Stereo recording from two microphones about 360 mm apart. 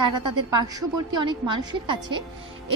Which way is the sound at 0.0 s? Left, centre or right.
Centre.